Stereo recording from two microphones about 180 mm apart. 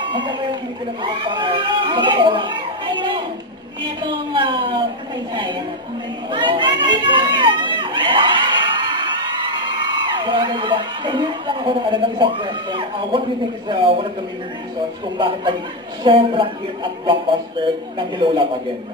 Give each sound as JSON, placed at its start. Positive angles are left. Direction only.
{"t": 0.1, "sound": "a woman's voice", "side_deg": -25}
{"t": 6.3, "sound": "a sound", "side_deg": -25}
{"t": 9.6, "sound": "a woman's voice", "side_deg": -25}
{"t": 15.1, "sound": "a woman's voice", "side_deg": -25}